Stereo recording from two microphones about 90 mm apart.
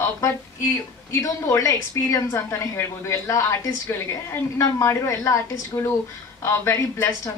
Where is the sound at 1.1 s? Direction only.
35° left (ahead or behind).